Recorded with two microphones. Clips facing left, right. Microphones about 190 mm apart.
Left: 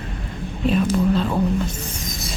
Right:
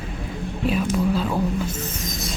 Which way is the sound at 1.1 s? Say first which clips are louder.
Left 2 dB; 5° right (ahead or behind).